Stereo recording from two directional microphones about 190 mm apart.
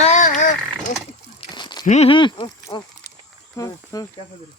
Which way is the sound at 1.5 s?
25° left (ahead or behind).